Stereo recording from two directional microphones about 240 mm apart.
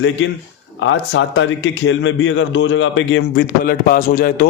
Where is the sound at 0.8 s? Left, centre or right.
Left.